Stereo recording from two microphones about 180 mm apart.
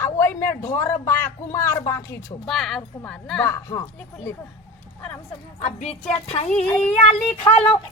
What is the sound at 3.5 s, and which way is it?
Speech, 20° left (ahead or behind).